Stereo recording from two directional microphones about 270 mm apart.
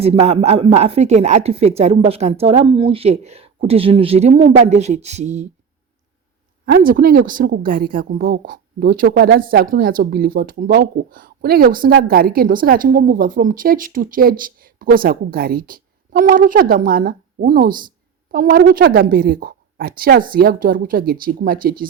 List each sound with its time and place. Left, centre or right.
0.0 s a woman's voice: right
6.7 s a woman's voice: right